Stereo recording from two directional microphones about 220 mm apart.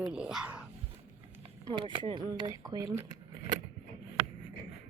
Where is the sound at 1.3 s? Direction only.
15° right (ahead or behind).